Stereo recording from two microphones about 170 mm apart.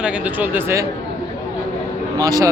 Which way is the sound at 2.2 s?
20° right (ahead or behind).